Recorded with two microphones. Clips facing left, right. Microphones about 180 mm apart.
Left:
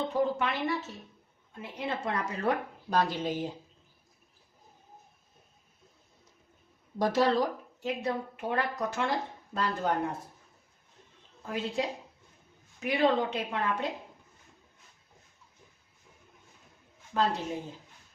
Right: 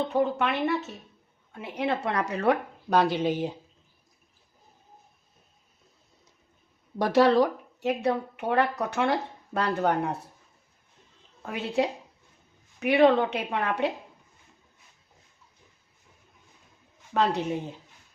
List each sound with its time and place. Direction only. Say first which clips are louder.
0.1 s speech: right 3 dB; 65° right (ahead or behind)
7.0 s speech: right 5 dB; 70° right (ahead or behind)
11.4 s speech: right 5 dB; 65° right (ahead or behind)
17.1 s speech: right 3 dB; 70° right (ahead or behind)